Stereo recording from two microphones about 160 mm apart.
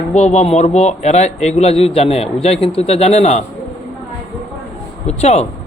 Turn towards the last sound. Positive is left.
turn(degrees=40)  # may be behind; listen again after turning